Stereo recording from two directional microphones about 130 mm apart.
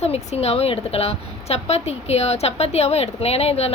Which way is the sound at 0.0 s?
55° left (ahead or behind).